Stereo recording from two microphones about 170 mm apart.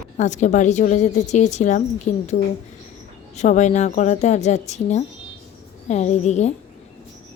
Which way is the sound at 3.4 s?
45° left (ahead or behind).